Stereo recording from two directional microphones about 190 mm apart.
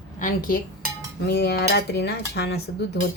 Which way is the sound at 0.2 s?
45° left (ahead or behind).